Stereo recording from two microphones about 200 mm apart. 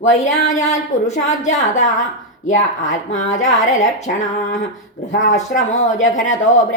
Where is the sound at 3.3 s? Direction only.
70° left (ahead or behind).